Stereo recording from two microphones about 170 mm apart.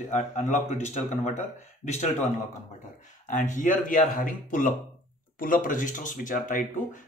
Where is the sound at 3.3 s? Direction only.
50° left (ahead or behind).